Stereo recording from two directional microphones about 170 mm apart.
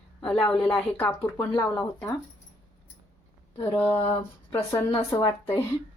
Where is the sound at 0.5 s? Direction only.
10° left (ahead or behind).